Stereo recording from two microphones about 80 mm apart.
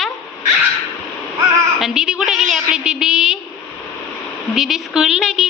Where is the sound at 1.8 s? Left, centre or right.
Centre.